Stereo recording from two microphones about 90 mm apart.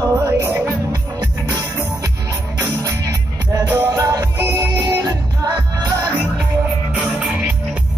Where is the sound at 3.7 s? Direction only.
40° right (ahead or behind).